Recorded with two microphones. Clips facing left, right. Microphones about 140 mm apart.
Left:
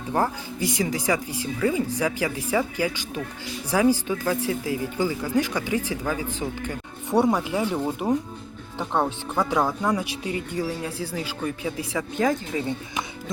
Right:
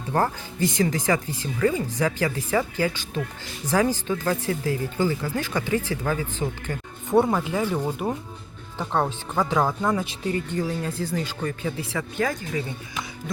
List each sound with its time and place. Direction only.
0.1 s speech: 10° left (ahead or behind)